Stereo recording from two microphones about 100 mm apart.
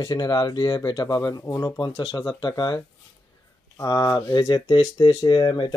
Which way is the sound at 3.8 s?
40° left (ahead or behind).